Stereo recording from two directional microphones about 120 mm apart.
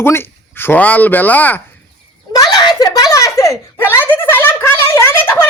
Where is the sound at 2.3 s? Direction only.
35° left (ahead or behind).